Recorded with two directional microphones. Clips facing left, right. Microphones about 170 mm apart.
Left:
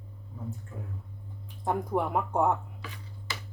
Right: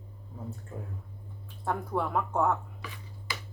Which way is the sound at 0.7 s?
35° right (ahead or behind).